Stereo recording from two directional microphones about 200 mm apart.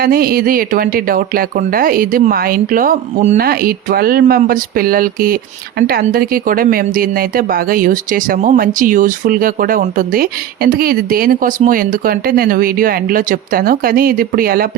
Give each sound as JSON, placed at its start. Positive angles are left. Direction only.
{"t": 0.0, "sound": "speech", "side_deg": -50}